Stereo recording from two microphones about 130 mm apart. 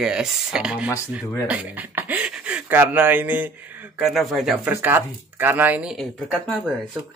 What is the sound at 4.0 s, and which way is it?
Speech, centre (ahead or behind).